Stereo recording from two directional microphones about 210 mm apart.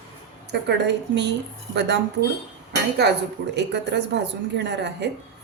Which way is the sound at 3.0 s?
50° right (ahead or behind).